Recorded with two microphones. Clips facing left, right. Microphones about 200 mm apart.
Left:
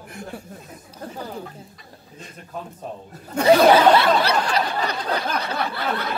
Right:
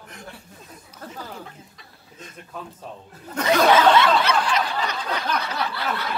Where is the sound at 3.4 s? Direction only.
30° left (ahead or behind).